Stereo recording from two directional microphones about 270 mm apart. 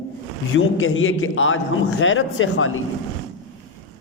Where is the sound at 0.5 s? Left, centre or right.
Left.